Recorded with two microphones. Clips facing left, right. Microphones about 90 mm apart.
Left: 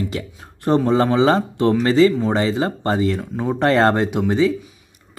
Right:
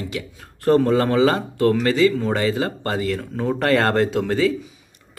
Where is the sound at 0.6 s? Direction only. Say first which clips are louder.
Even; 20° left (ahead or behind).